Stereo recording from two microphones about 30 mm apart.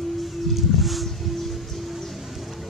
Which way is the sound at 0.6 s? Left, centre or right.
Centre.